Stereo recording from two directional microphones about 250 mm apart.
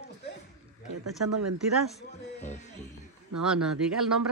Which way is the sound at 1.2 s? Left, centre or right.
Right.